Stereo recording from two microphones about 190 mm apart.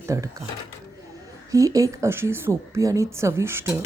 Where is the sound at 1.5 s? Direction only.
15° right (ahead or behind).